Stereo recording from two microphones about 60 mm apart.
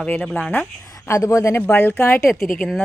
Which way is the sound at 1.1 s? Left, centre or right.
Left.